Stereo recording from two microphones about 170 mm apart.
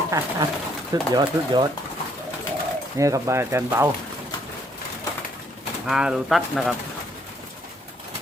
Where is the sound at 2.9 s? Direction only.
20° right (ahead or behind).